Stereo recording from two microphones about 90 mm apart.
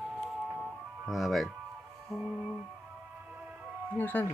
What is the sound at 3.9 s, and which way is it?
Speech, 20° left (ahead or behind).